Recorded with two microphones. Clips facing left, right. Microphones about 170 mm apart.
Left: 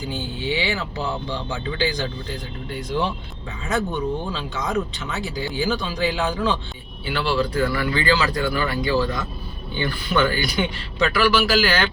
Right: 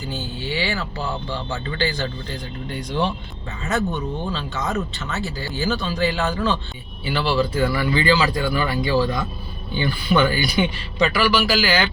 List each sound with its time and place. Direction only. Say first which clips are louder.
0.1 s speech: left 2 dB; 15° left (ahead or behind)
7.0 s speech: right 1 dB; 5° right (ahead or behind)
11.3 s speech: even; centre (ahead or behind)